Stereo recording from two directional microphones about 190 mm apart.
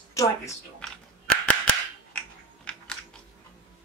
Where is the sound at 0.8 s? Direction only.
5° left (ahead or behind).